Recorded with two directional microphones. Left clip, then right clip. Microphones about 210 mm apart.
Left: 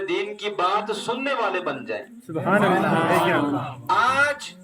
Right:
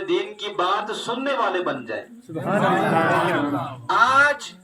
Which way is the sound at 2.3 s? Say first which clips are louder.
Left 1 dB; 45° left (ahead or behind).